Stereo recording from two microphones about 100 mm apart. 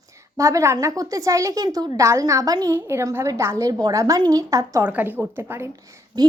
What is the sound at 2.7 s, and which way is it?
A woman's voice, 25° right (ahead or behind).